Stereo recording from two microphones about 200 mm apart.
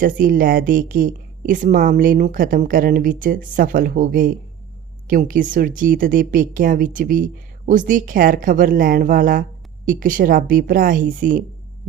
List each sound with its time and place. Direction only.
0.0 s a woman's voice: 45° right (ahead or behind)